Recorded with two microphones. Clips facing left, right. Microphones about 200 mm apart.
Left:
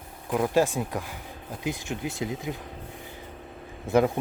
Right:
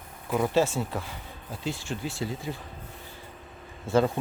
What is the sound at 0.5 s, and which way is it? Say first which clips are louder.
Speech: left 1 dB; 15° left (ahead or behind).